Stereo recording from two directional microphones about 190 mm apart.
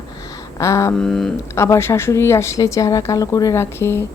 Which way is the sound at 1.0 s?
5° left (ahead or behind).